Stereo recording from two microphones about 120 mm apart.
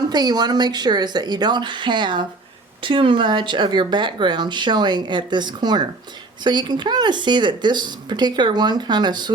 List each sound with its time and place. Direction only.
0.1 s speech: 35° right (ahead or behind)